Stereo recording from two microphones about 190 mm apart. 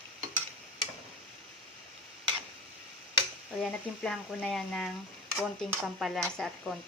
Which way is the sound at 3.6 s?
Centre (ahead or behind).